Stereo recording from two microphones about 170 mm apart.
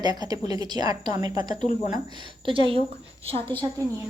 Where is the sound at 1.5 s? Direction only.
40° left (ahead or behind).